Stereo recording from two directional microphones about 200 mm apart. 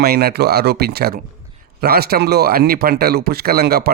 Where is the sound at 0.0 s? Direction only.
50° right (ahead or behind).